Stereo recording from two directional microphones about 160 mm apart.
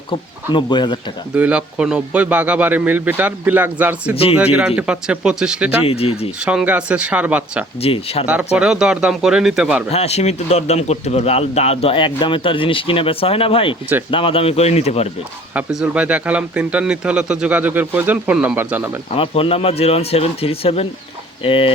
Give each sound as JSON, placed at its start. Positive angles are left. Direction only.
{"t": 0.1, "sound": "speech", "side_deg": 30}
{"t": 1.4, "sound": "speech", "side_deg": -10}
{"t": 4.1, "sound": "speech", "side_deg": 35}
{"t": 4.5, "sound": "speech", "side_deg": -5}
{"t": 5.8, "sound": "speech", "side_deg": 40}
{"t": 6.4, "sound": "speech", "side_deg": -5}
{"t": 7.8, "sound": "speech", "side_deg": 40}
{"t": 8.5, "sound": "speech", "side_deg": -5}
{"t": 9.9, "sound": "speech", "side_deg": 40}
{"t": 15.5, "sound": "speech", "side_deg": -5}
{"t": 19.1, "sound": "speech", "side_deg": 35}